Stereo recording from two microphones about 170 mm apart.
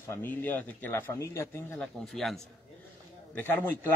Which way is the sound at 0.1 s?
10° left (ahead or behind).